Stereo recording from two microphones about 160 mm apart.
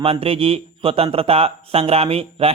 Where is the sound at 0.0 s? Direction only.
35° right (ahead or behind).